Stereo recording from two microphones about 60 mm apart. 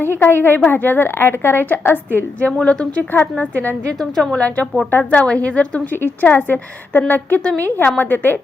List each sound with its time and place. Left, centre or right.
0.2 s a woman's voice: left
2.4 s a woman's voice: centre
4.0 s a woman's voice: centre
4.4 s speech: left
4.9 s a woman's voice: left
5.5 s speech: left
6.0 s a woman's voice: left